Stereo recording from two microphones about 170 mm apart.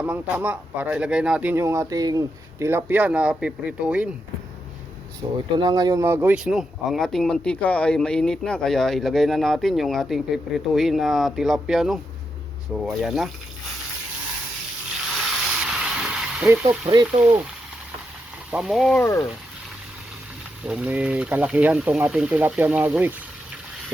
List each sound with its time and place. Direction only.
0.0 s speech: 10° right (ahead or behind)
5.2 s speech: 30° right (ahead or behind); by 13.3 s centre (ahead or behind)
15.6 s a sound: 5° right (ahead or behind)
16.6 s speech: 25° right (ahead or behind)
18.5 s speech: centre (ahead or behind)
18.9 s speech: 15° left (ahead or behind)
20.7 s speech: 5° right (ahead or behind)